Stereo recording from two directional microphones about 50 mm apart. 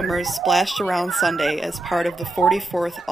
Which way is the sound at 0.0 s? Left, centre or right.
Centre.